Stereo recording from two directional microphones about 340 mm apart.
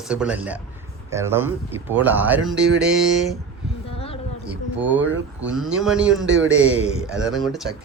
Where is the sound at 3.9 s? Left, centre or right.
Centre.